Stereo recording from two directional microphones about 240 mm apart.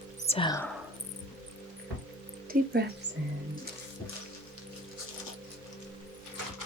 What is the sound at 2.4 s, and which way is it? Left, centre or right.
Speech, right.